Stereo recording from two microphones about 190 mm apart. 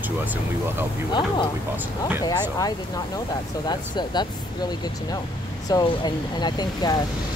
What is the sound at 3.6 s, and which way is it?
Speech, 25° left (ahead or behind).